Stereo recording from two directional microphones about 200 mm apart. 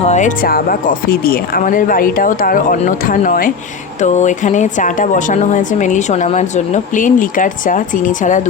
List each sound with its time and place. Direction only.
0.1 s speech: 40° left (ahead or behind)